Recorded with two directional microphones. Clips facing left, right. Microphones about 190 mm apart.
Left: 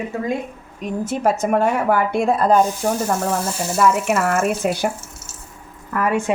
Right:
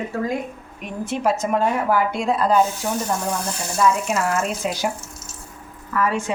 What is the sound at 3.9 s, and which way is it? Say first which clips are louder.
Speech: left 3 dB; 60° left (ahead or behind).